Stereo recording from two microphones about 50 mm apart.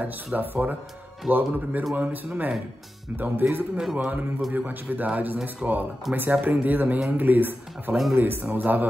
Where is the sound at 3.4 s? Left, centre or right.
Right.